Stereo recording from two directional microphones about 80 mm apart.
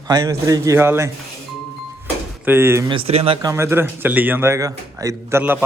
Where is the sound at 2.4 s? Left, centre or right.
Right.